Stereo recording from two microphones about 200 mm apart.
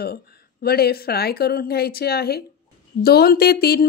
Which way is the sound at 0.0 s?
50° left (ahead or behind).